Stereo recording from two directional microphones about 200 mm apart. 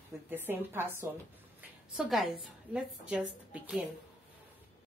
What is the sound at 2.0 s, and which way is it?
Speech, centre (ahead or behind).